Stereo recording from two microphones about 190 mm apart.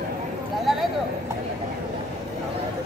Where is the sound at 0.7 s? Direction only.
Centre (ahead or behind).